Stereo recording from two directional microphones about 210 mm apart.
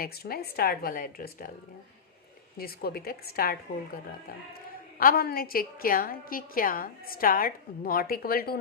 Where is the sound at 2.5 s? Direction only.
45° left (ahead or behind).